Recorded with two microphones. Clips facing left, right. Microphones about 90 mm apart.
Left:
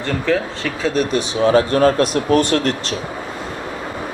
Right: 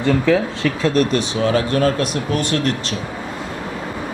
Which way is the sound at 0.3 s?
Centre (ahead or behind).